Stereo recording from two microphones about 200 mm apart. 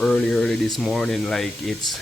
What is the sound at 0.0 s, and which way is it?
Speech, 5° left (ahead or behind).